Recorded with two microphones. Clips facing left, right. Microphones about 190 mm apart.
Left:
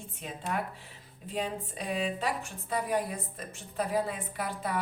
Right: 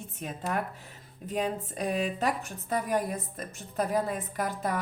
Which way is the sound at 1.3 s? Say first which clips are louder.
Right 3 dB; 45° right (ahead or behind).